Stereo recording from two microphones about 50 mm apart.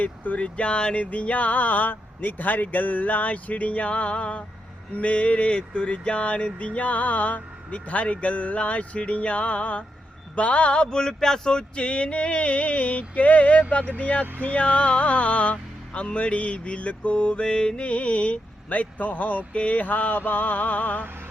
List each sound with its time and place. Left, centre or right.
0.0 s music: left